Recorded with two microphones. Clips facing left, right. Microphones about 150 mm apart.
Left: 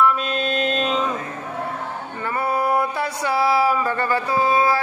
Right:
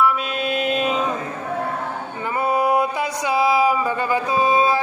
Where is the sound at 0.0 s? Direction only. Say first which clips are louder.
Left 1 dB; 5° right (ahead or behind).